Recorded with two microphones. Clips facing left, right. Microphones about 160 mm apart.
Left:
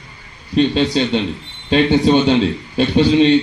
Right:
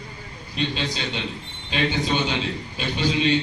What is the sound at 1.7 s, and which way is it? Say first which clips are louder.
Speech: left 11 dB; 40° left (ahead or behind).